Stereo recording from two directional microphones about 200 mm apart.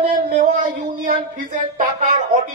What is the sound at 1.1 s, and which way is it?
Speech, 40° right (ahead or behind).